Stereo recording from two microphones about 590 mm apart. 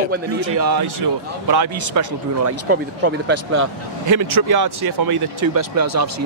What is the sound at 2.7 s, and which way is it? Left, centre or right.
Speech, centre.